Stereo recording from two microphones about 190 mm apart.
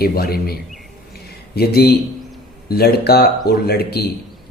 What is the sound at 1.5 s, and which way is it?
Speech, 55° left (ahead or behind).